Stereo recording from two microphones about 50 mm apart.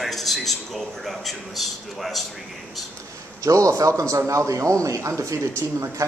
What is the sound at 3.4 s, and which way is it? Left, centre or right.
A man's voice, right.